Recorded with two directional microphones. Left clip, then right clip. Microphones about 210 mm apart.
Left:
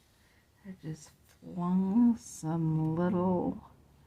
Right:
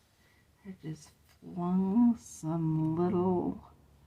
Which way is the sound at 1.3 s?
15° left (ahead or behind).